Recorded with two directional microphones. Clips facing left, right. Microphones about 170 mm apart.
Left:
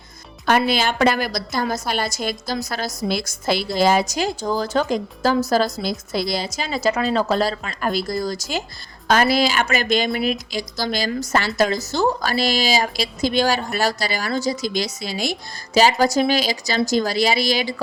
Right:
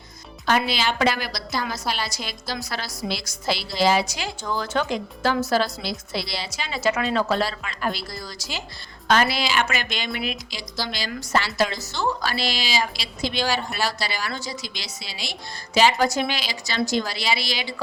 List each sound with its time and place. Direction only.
0.4 s a woman's voice: 50° left (ahead or behind)